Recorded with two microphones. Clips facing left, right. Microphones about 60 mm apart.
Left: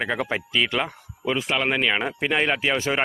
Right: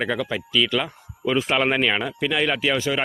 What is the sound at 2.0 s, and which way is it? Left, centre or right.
Speech, left.